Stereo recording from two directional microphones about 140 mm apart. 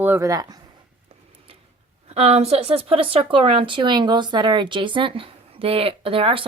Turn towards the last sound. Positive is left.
turn(degrees=-40)  # may be behind; listen again after turning